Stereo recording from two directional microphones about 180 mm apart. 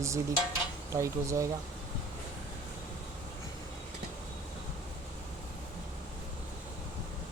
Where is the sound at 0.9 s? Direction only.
15° right (ahead or behind).